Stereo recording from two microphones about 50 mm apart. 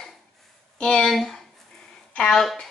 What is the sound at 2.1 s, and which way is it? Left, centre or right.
Speech, centre.